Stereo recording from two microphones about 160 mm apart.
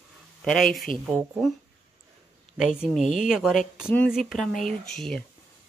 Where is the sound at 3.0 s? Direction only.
50° left (ahead or behind).